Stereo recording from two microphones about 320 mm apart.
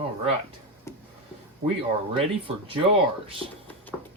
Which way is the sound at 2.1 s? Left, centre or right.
Centre.